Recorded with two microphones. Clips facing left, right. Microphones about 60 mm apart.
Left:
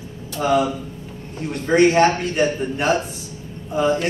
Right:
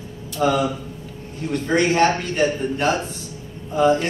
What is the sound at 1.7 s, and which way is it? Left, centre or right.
Speech, left.